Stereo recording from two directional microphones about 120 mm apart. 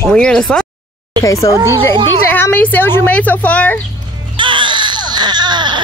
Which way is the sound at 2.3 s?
15° left (ahead or behind).